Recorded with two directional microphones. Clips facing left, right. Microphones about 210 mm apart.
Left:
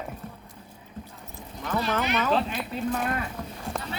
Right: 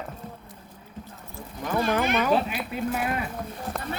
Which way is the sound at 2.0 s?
50° right (ahead or behind).